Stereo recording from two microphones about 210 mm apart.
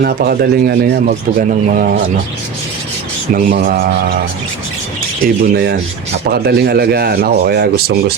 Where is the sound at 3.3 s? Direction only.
45° right (ahead or behind).